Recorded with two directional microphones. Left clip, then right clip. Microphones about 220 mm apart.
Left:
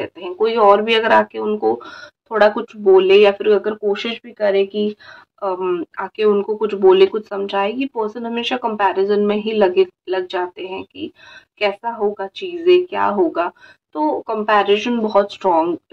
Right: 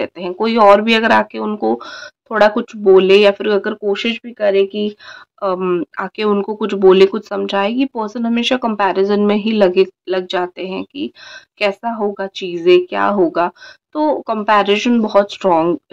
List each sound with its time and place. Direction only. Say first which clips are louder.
0.0 s speech: right 1 dB; 45° right (ahead or behind)